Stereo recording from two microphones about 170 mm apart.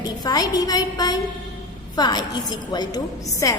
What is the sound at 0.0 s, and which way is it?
A woman's voice, 25° left (ahead or behind).